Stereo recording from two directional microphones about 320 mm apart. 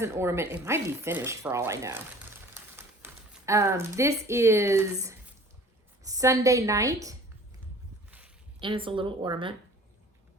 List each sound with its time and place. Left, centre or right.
0.0 s speech: centre
8.6 s speech: centre